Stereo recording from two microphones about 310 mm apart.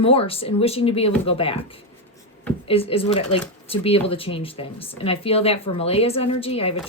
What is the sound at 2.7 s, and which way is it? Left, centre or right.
Speech, centre.